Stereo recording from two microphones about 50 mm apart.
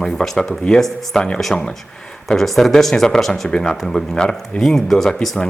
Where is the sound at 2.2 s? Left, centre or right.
Centre.